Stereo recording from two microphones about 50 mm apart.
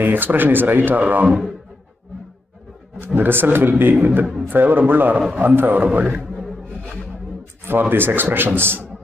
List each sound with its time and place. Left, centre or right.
0.0 s speech: right
3.2 s a man's voice: right
6.0 s a man's voice: right
7.9 s a man's voice: right